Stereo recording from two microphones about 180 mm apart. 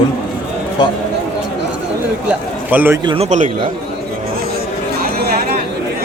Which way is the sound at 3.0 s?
30° right (ahead or behind).